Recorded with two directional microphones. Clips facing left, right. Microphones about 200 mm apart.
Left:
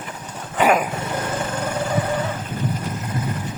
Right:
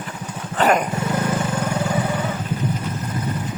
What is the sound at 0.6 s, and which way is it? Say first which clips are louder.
Dog: even; 10° left (ahead or behind).